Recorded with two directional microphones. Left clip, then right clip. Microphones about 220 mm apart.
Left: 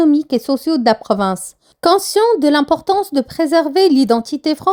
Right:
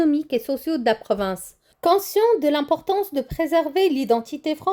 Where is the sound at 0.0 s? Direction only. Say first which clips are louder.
Left 7 dB; 25° left (ahead or behind).